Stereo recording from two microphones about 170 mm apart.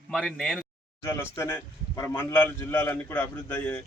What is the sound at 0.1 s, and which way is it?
Speech, centre (ahead or behind).